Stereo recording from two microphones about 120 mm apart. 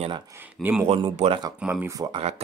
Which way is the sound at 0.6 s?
15° right (ahead or behind).